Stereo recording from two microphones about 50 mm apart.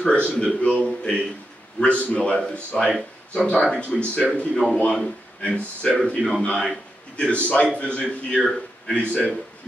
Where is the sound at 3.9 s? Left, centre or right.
Centre.